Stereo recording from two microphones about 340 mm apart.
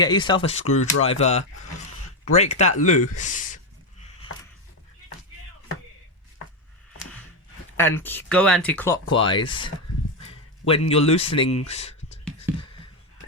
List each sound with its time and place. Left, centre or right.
0.0 s a man's voice: centre
0.6 s speech: left
1.0 s a man's voice: centre
7.8 s a man's voice: centre
10.7 s a man's voice: centre